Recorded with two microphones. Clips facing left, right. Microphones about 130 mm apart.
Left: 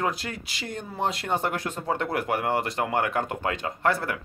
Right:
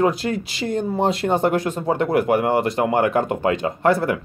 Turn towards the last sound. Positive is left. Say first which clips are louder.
# right 7 dB
turn(degrees=-20)  # may be behind; listen again after turning